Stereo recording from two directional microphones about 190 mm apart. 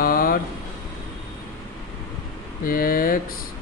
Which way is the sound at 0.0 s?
50° left (ahead or behind).